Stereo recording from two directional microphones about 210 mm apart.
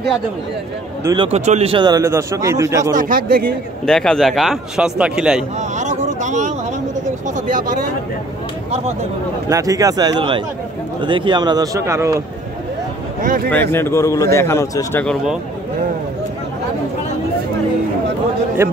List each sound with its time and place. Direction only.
1.0 s a man's voice: 25° right (ahead or behind)
3.0 s a man's voice: 40° right (ahead or behind)
3.8 s speech: 5° left (ahead or behind)
5.6 s a sound: 35° right (ahead or behind)
7.3 s speech: 40° right (ahead or behind)
9.5 s a man's voice: 15° right (ahead or behind)
13.2 s speech: 40° right (ahead or behind)
13.5 s a man's voice: 10° left (ahead or behind)
18.6 s a man's voice: 15° right (ahead or behind)